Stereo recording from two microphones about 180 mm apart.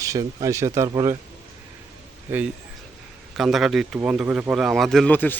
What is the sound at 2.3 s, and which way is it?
Speech, 10° right (ahead or behind).